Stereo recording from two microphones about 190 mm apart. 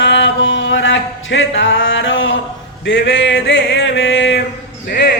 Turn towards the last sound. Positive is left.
turn(degrees=60)  # may be behind; listen again after turning